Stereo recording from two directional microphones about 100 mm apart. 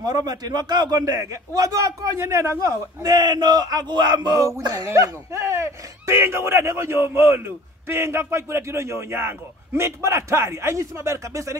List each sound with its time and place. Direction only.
0.0 s a man's voice: 40° right (ahead or behind)